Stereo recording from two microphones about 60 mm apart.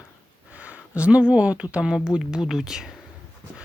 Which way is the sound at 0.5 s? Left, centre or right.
Right.